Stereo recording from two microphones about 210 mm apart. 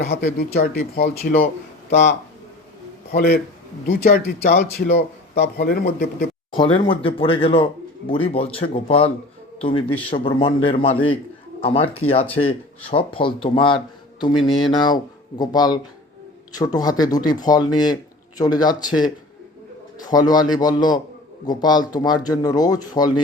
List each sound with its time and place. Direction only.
0.2 s speech: 45° left (ahead or behind)
3.1 s speech: 45° left (ahead or behind)
6.7 s a man's voice: 25° left (ahead or behind)